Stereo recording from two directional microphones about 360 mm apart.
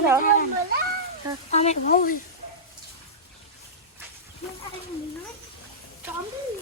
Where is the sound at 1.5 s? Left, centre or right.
Centre.